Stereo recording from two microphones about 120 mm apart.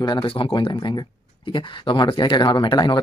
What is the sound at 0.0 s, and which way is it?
Speech, 40° left (ahead or behind).